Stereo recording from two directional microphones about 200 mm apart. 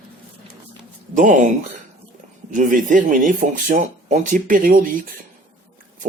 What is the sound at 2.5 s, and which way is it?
Speech, 40° right (ahead or behind).